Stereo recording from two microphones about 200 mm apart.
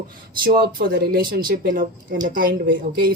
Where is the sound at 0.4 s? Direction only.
45° right (ahead or behind).